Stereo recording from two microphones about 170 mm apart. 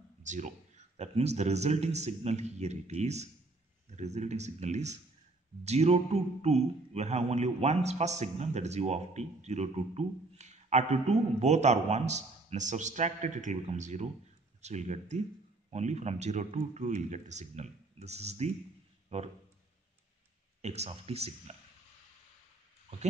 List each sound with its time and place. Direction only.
0.2 s speech: 45° right (ahead or behind)
20.6 s speech: 40° right (ahead or behind)